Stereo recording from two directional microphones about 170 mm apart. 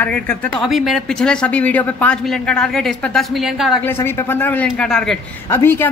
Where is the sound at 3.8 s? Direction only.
15° left (ahead or behind).